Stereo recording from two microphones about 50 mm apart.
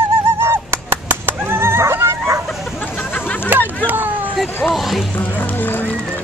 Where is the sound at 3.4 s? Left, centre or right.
Right.